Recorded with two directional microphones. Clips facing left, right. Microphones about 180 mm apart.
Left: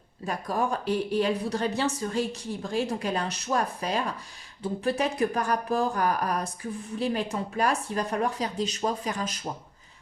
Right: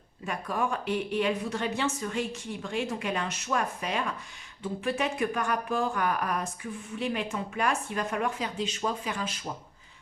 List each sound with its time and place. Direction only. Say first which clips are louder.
0.3 s speech: left 2 dB; 35° left (ahead or behind)